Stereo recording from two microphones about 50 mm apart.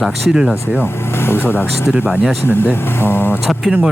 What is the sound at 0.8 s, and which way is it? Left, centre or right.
Vehicle, left.